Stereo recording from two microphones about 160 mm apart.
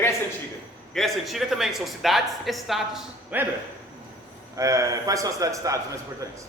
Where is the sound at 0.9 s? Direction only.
Centre (ahead or behind).